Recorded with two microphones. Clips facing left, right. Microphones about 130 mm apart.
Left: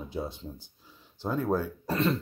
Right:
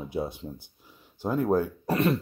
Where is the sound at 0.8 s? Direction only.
15° right (ahead or behind).